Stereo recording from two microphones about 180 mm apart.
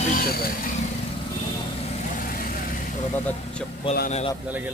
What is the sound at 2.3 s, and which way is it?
Vehicle, 50° left (ahead or behind).